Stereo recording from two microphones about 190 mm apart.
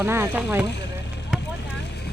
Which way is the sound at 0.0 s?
10° right (ahead or behind).